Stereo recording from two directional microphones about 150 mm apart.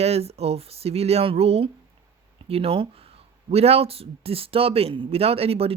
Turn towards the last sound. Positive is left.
turn(degrees=-40)  # may be behind; listen again after turning